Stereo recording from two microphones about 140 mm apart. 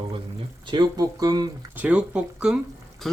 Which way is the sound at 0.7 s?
30° right (ahead or behind).